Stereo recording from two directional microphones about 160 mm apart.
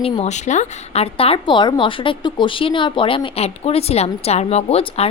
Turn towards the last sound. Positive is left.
turn(degrees=40)  # may be behind; listen again after turning